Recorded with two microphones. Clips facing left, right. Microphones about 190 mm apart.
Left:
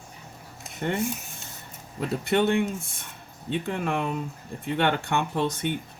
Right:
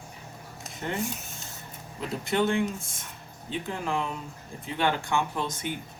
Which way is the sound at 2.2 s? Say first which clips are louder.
Left 2 dB; 65° left (ahead or behind).